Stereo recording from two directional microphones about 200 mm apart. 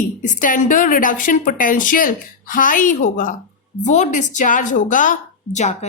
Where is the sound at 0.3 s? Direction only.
40° left (ahead or behind).